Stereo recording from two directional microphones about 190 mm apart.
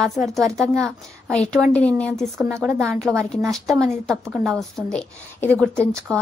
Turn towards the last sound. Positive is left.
turn(degrees=5)  # may be behind; listen again after turning